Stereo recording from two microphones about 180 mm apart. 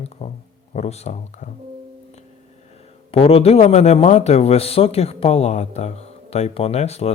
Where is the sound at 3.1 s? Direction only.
30° left (ahead or behind).